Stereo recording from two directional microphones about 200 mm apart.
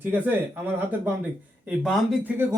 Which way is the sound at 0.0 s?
10° right (ahead or behind).